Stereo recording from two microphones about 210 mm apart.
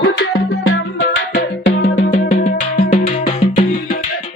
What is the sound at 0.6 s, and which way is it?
Music, 70° left (ahead or behind).